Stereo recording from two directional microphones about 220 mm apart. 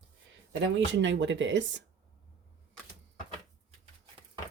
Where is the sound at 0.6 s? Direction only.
55° right (ahead or behind).